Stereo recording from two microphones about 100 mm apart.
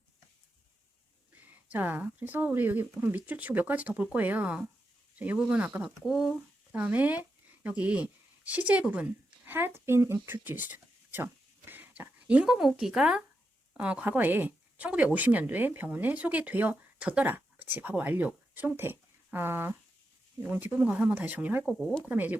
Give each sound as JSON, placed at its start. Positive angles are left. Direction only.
{"t": 1.6, "sound": "speech", "side_deg": -15}
{"t": 21.6, "sound": "speech", "side_deg": 0}
{"t": 22.0, "sound": "speech", "side_deg": -15}